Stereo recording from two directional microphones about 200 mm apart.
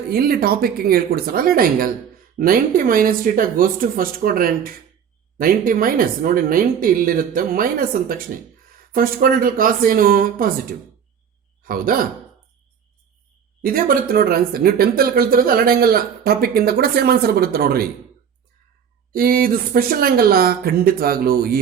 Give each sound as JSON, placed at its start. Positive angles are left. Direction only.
{"t": 0.1, "sound": "speech", "side_deg": -50}
{"t": 11.6, "sound": "speech", "side_deg": -45}
{"t": 13.6, "sound": "speech", "side_deg": -45}
{"t": 19.1, "sound": "speech", "side_deg": -45}